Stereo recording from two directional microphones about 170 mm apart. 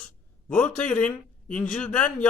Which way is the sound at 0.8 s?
5° left (ahead or behind).